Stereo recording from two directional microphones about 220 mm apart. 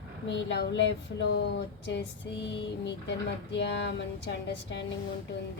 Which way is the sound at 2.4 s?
50° left (ahead or behind).